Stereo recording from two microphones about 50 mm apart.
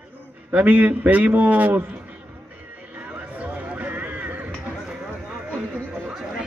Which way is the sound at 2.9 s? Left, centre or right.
Right.